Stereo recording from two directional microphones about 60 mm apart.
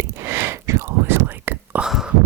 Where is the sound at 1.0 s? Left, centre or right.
Right.